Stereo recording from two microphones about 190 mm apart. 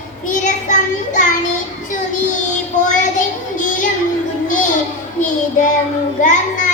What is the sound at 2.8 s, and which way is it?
Child singing, 40° left (ahead or behind).